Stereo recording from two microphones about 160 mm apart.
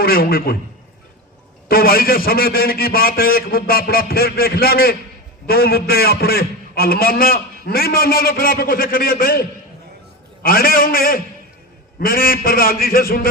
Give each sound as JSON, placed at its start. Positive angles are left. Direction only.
{"t": 0.0, "sound": "a man's voice", "side_deg": 70}
{"t": 1.6, "sound": "a man's voice", "side_deg": 70}